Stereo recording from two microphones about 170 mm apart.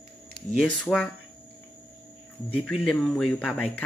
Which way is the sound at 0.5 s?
5° left (ahead or behind).